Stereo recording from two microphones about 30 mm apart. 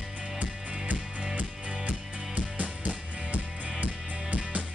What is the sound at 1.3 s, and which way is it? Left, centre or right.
Music, right.